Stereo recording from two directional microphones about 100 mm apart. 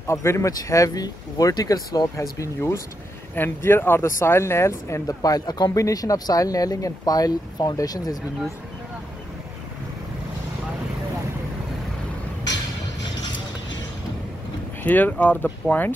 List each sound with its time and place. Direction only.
0.0 s speech: 25° left (ahead or behind)
14.8 s speech: 15° left (ahead or behind)